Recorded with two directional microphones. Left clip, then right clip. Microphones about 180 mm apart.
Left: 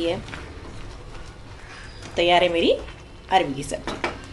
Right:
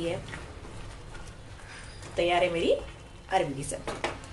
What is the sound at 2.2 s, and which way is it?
A woman's voice, 55° left (ahead or behind).